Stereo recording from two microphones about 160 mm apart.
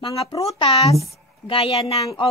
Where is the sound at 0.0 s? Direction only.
35° left (ahead or behind).